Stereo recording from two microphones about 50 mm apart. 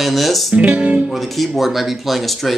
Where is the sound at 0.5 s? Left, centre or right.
Right.